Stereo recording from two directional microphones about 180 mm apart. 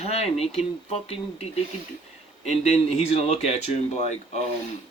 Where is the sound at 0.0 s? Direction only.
35° left (ahead or behind).